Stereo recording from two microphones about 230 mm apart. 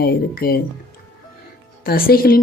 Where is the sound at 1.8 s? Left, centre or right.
Left.